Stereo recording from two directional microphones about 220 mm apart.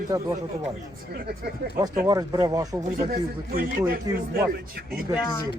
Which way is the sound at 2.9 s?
40° right (ahead or behind).